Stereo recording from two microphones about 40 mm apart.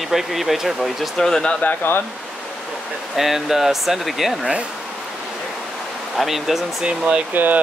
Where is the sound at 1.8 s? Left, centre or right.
Left.